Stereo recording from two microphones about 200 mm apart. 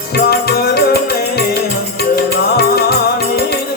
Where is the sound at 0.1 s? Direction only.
50° left (ahead or behind).